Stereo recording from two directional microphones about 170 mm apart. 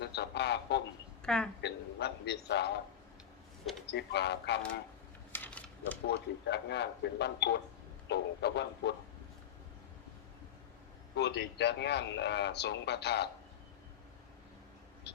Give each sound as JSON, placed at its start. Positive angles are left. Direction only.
{"t": 0.0, "sound": "speech", "side_deg": 80}
{"t": 1.2, "sound": "a woman's voice", "side_deg": 5}
{"t": 1.6, "sound": "a man's voice", "side_deg": 80}
{"t": 3.9, "sound": "a man's voice", "side_deg": 80}
{"t": 5.3, "sound": "a sound", "side_deg": 10}
{"t": 6.1, "sound": "a man's voice", "side_deg": 80}
{"t": 11.1, "sound": "a man's voice", "side_deg": 80}